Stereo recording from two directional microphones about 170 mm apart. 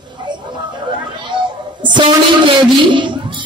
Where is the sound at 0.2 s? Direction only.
25° right (ahead or behind).